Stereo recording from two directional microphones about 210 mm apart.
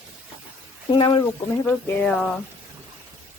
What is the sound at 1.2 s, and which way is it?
Speech, 10° left (ahead or behind).